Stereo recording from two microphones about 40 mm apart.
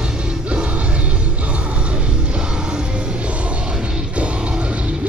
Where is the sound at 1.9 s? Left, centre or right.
Right.